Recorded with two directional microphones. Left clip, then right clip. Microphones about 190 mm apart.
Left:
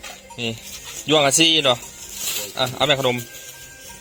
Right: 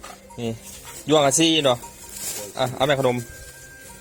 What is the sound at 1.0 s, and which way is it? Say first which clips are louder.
Speech: left 2 dB; 15° right (ahead or behind).